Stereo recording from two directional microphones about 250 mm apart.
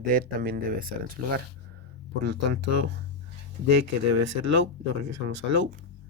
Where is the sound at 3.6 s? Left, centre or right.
Right.